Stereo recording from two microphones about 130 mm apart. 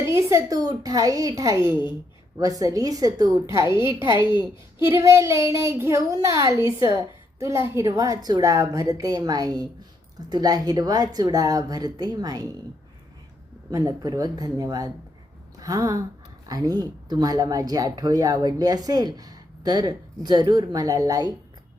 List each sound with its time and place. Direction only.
0.0 s a woman's voice: 20° right (ahead or behind)
13.7 s a woman's voice: 25° right (ahead or behind)